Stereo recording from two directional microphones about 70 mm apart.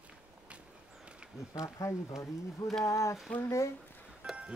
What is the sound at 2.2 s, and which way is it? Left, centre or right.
Speech, centre.